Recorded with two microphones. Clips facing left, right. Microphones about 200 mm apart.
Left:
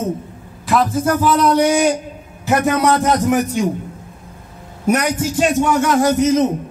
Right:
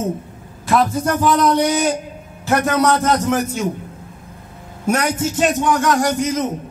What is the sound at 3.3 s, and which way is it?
Speech, 15° left (ahead or behind).